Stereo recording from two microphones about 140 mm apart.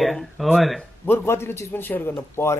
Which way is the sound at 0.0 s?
Centre (ahead or behind).